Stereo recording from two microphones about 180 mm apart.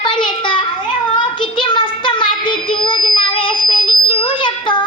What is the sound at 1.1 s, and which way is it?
Child singing, 25° left (ahead or behind).